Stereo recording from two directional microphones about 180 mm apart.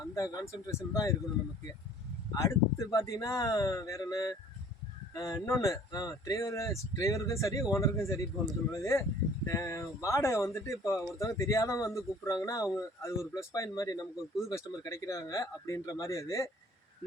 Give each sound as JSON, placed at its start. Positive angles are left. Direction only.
{"t": 0.0, "sound": "speech", "side_deg": 15}
{"t": 2.3, "sound": "speech", "side_deg": 20}